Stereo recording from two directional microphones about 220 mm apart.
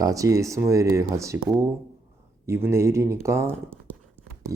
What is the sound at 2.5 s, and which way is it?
Speech, 10° right (ahead or behind).